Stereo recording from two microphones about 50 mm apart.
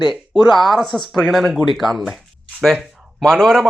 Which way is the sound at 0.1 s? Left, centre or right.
Centre.